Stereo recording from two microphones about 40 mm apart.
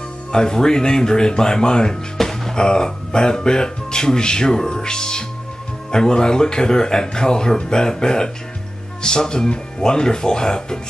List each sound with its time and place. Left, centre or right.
0.3 s speech: centre